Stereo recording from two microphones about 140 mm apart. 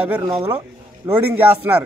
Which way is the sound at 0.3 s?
20° right (ahead or behind).